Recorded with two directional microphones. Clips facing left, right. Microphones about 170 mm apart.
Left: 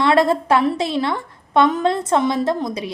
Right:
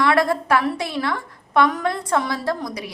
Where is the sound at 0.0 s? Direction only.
25° left (ahead or behind).